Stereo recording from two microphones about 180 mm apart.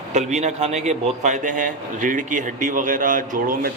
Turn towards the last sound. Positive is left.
turn(degrees=-50)  # may be behind; listen again after turning